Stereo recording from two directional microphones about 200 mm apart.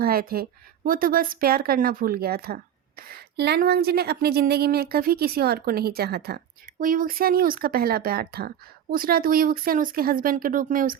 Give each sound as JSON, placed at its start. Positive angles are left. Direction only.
{"t": 0.0, "sound": "a woman's voice", "side_deg": -50}